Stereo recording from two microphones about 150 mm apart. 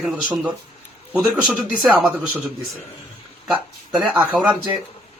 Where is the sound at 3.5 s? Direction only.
5° right (ahead or behind).